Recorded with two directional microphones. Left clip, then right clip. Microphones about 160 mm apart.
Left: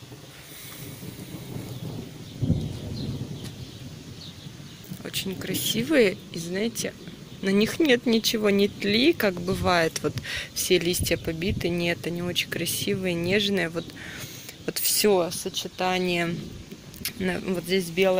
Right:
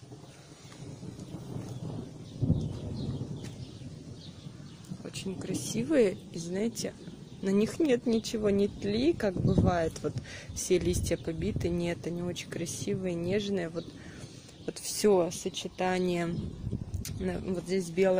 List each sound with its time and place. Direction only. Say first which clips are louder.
2.4 s a sound: left 4 dB; 5° left (ahead or behind)
5.0 s speech: left 7 dB; 5° right (ahead or behind)
10.5 s speech: left 5 dB; 10° right (ahead or behind); by 13.8 s 5° left (ahead or behind)
14.7 s a sound: left 9 dB; 5° right (ahead or behind)
15.2 s speech: left 5 dB; 30° right (ahead or behind); by 16.3 s 10° right (ahead or behind)
17.0 s speech: left 8 dB; centre (ahead or behind)